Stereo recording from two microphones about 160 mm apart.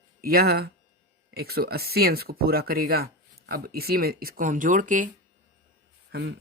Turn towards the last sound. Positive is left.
turn(degrees=-80)